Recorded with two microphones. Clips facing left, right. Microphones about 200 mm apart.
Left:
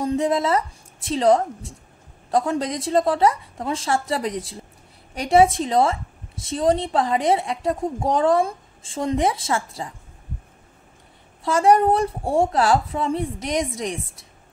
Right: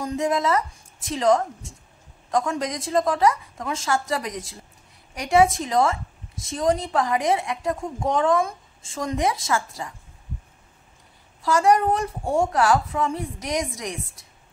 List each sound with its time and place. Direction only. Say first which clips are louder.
0.0 s a woman's voice: left 3 dB; 30° left (ahead or behind)
11.4 s a woman's voice: left 2 dB; 30° left (ahead or behind)